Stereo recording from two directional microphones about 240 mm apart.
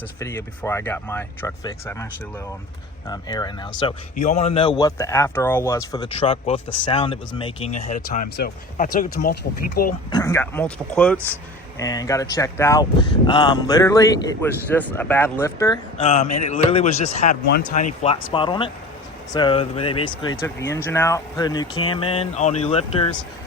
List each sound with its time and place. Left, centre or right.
0.2 s speech: centre
3.1 s speech: centre
4.1 s speech: left
10.1 s speech: centre
16.0 s speech: left